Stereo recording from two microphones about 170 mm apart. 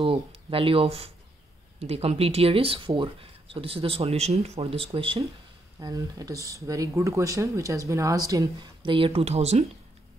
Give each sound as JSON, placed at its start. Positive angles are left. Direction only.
{"t": 0.0, "sound": "speech", "side_deg": -35}
{"t": 5.8, "sound": "speech", "side_deg": -20}